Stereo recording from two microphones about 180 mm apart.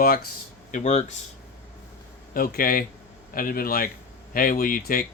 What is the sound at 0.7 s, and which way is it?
Speech, 40° left (ahead or behind).